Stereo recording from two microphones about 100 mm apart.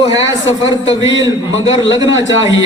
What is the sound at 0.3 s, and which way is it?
Speech, 35° right (ahead or behind).